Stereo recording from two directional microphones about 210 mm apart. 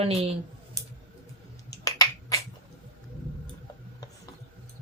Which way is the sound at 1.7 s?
15° left (ahead or behind).